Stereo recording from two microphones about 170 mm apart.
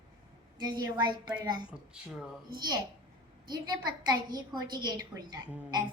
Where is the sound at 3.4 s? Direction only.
25° right (ahead or behind).